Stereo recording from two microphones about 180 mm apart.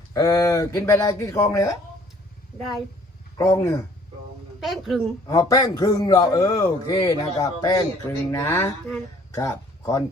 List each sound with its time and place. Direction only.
0.1 s a man's voice: 20° left (ahead or behind)
2.6 s a woman's voice: centre (ahead or behind)
3.3 s speech: 15° left (ahead or behind)
4.6 s a woman's voice: centre (ahead or behind)
5.2 s a man's voice: 20° left (ahead or behind)